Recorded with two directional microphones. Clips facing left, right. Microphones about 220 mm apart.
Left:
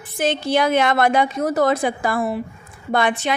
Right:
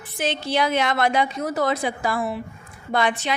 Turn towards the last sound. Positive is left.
turn(degrees=55)  # may be behind; listen again after turning